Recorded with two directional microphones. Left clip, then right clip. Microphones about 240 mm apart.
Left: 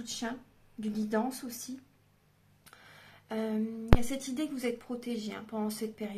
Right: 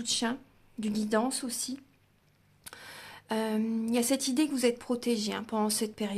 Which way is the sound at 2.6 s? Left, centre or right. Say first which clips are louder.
Right 8 dB; right.